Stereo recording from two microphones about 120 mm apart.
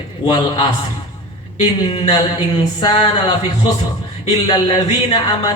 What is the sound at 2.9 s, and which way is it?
Speech, 45° left (ahead or behind).